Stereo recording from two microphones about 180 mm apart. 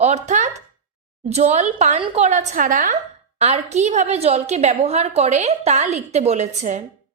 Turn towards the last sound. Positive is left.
turn(degrees=-40)  # may be behind; listen again after turning